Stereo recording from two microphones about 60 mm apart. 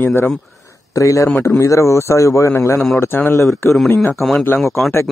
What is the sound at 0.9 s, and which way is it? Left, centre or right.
Speech, left.